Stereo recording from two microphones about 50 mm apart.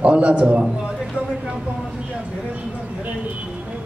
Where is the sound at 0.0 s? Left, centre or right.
Right.